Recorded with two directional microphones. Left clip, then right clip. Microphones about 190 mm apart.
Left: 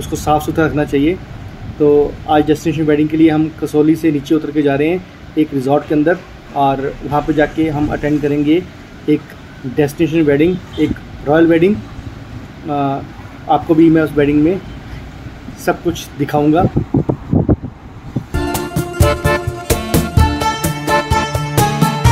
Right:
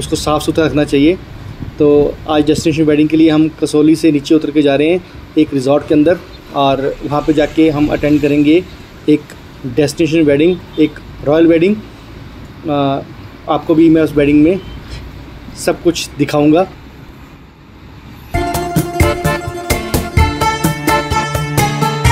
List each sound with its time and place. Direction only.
0.2 s speech: 20° right (ahead or behind)
15.7 s speech: 20° right (ahead or behind)
18.4 s music: centre (ahead or behind)